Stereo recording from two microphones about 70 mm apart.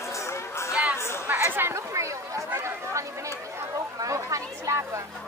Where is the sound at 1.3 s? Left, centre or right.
Right.